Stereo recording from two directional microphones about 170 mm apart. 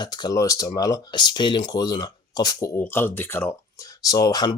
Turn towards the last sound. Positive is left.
turn(degrees=25)  # may be behind; listen again after turning